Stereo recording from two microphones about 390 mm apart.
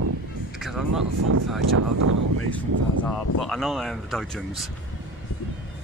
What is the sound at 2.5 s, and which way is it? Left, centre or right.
Speech, centre.